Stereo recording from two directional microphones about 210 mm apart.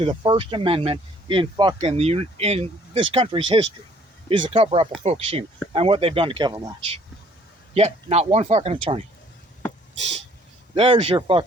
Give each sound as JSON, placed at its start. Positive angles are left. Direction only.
{"t": 0.0, "sound": "speech", "side_deg": -25}
{"t": 10.8, "sound": "speech", "side_deg": -25}